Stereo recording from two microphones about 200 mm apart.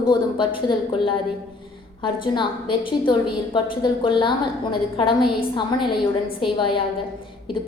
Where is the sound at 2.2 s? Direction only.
25° left (ahead or behind).